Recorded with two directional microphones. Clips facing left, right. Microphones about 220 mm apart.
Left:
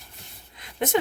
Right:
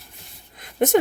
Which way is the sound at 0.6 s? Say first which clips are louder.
Right 6 dB; 45° right (ahead or behind).